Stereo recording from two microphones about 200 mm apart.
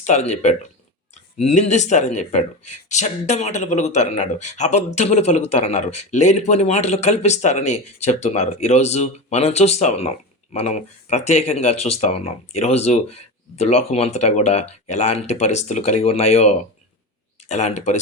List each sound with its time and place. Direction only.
0.0 s speech: 35° left (ahead or behind)